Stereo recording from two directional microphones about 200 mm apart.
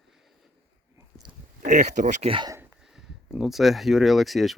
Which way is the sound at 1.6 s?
40° right (ahead or behind).